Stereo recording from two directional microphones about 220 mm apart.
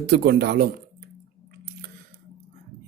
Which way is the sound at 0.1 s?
50° right (ahead or behind).